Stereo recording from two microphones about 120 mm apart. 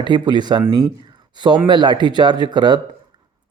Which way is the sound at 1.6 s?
40° right (ahead or behind).